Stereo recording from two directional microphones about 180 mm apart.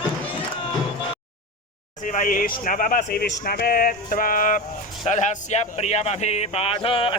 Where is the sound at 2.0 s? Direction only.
45° left (ahead or behind).